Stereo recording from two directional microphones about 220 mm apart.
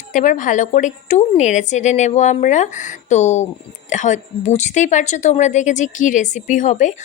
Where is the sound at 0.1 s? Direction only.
35° left (ahead or behind).